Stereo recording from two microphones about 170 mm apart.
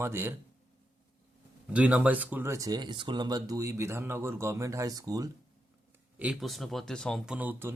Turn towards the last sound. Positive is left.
turn(degrees=-10)  # may be behind; listen again after turning